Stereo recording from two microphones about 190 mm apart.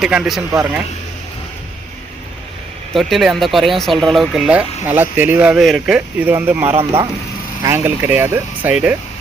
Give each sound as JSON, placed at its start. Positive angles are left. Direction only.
{"t": 0.0, "sound": "speech", "side_deg": -5}
{"t": 2.9, "sound": "speech", "side_deg": 0}
{"t": 6.7, "sound": "speech", "side_deg": -30}
{"t": 7.6, "sound": "speech", "side_deg": -10}